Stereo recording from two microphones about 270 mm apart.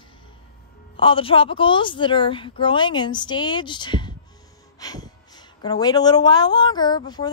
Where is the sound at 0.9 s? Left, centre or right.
Centre.